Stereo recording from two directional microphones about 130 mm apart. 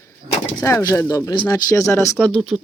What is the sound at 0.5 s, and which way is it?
Speech, 25° left (ahead or behind).